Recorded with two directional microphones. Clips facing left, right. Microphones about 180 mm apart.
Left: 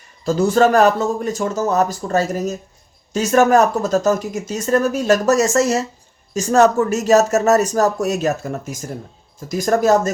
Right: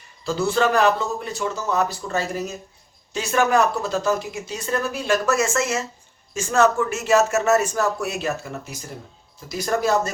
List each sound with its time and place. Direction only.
0.3 s speech: 45° left (ahead or behind)